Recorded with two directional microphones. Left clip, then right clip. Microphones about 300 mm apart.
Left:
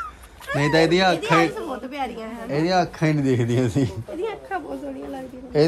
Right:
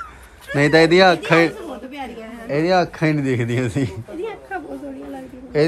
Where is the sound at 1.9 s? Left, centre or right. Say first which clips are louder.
Left 3 dB; left.